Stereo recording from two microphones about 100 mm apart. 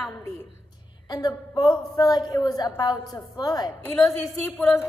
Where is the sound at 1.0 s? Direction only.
45° left (ahead or behind).